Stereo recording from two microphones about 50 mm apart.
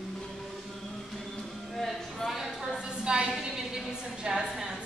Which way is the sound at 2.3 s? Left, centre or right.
Centre.